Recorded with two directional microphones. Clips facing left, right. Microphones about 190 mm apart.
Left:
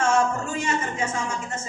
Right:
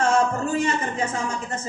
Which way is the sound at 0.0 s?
35° right (ahead or behind).